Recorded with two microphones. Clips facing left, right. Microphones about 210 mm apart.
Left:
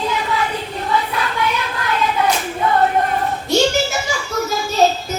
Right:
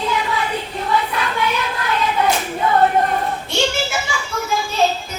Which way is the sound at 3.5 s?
40° left (ahead or behind).